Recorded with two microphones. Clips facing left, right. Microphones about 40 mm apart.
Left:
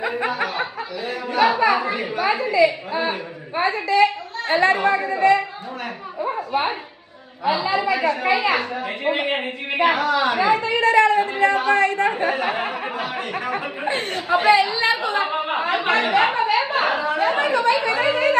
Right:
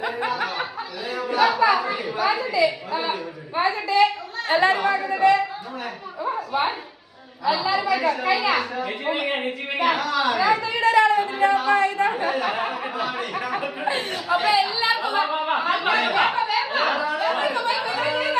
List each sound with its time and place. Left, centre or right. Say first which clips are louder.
0.0 s snicker: left 2 dB; left
1.3 s a sound: left 1 dB; left
3.6 s speech: left 1 dB; left
7.4 s a man's voice: left 1 dB; left
9.7 s speech: left 4 dB; left
12.2 s speech: left 2 dB; left
14.3 s a woman's voice: left 4 dB; left
14.5 s speech: left 3 dB; left
15.2 s a woman's voice: even; left